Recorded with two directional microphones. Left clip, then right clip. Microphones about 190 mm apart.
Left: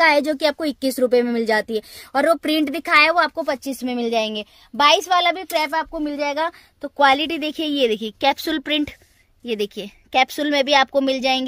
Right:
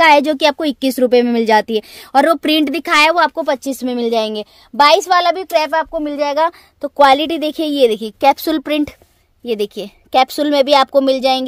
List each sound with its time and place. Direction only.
0.0 s a woman's voice: 40° right (ahead or behind)